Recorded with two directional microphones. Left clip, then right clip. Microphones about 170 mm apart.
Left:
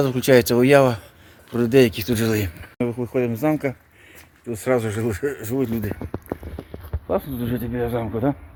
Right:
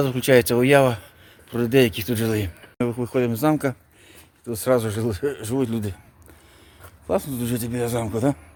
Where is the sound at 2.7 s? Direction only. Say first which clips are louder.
Even; 10° right (ahead or behind).